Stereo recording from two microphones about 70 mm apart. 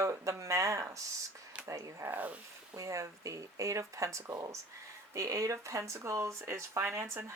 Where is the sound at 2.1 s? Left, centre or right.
Right.